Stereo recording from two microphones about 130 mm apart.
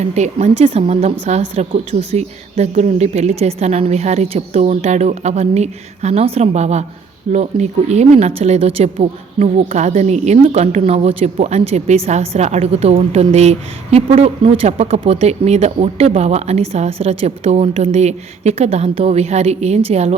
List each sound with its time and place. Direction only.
0.0 s a woman's voice: 65° right (ahead or behind)